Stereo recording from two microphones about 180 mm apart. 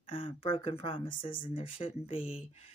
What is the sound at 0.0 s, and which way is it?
Speech, 30° left (ahead or behind).